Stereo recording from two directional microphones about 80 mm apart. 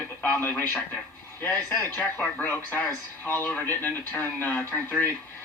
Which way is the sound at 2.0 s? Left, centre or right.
Left.